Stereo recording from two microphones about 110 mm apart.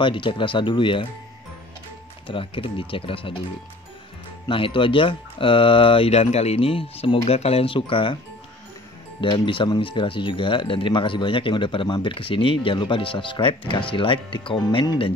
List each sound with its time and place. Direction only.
0.0 s speech: 50° left (ahead or behind)
2.2 s speech: 55° left (ahead or behind)
4.5 s speech: 50° left (ahead or behind)
7.2 s speech: 65° left (ahead or behind); by 8.2 s 50° left (ahead or behind)
9.2 s speech: 50° left (ahead or behind)